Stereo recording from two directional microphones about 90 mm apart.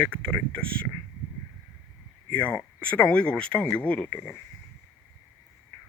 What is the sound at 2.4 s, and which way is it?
Speech, 15° left (ahead or behind).